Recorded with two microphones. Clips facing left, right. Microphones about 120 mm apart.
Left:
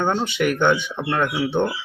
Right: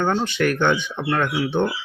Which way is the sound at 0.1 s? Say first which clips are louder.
Even; 5° left (ahead or behind).